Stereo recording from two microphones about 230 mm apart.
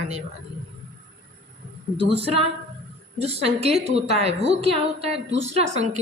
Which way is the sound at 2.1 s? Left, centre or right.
Right.